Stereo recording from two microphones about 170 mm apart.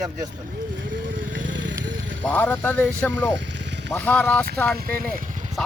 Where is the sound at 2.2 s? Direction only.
10° left (ahead or behind).